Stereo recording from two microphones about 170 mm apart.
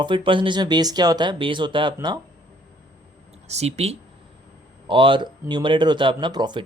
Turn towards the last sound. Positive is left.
turn(degrees=-25)  # may be behind; listen again after turning